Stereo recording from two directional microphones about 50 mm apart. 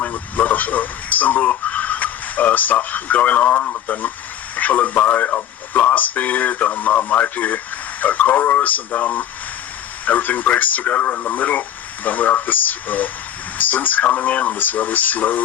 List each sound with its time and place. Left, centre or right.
0.0 s speech: left